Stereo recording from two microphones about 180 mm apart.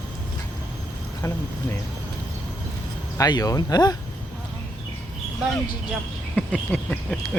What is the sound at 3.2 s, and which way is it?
Speech, 20° left (ahead or behind).